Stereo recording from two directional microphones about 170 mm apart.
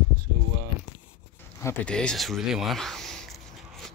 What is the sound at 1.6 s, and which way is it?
Speech, 15° left (ahead or behind).